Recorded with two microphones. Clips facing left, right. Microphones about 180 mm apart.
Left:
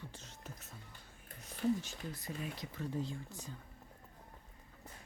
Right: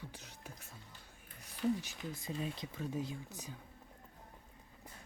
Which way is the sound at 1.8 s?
15° right (ahead or behind).